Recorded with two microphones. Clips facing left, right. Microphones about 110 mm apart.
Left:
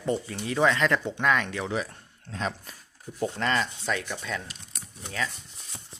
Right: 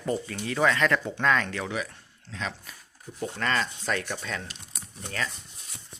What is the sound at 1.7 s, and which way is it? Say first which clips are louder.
Speech: left 2 dB; 30° left (ahead or behind).